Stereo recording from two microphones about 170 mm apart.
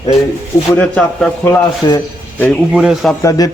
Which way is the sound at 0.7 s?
5° left (ahead or behind).